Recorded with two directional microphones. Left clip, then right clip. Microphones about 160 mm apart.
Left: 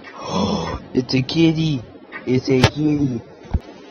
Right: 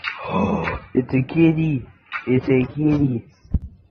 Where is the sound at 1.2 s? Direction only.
20° left (ahead or behind).